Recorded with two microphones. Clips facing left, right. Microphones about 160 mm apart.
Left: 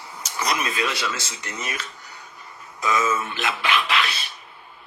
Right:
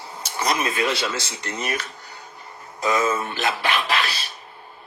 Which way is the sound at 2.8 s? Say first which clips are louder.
Right 1 dB; 30° right (ahead or behind).